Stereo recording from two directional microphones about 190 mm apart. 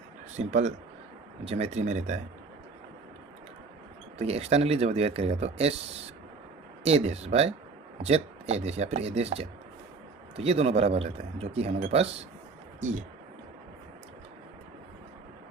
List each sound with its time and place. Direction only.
0.3 s speech: 40° right (ahead or behind)
4.2 s speech: 35° right (ahead or behind)
6.8 s speech: 35° right (ahead or behind)